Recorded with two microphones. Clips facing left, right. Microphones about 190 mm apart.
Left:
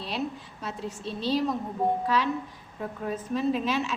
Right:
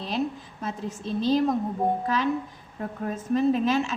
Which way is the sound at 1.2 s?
45° right (ahead or behind).